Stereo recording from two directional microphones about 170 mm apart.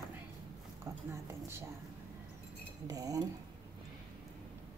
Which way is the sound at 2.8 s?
20° right (ahead or behind).